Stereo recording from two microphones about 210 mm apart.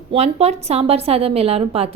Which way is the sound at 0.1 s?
30° right (ahead or behind).